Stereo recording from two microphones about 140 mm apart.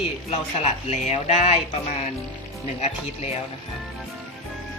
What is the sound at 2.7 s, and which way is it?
Speech, 50° left (ahead or behind).